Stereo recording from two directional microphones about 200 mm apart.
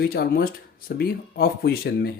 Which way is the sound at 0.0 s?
50° left (ahead or behind).